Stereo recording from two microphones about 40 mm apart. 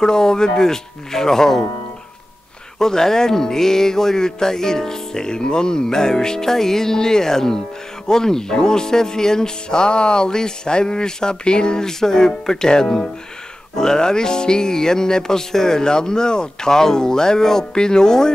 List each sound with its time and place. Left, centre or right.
0.0 s speech: centre
2.8 s speech: centre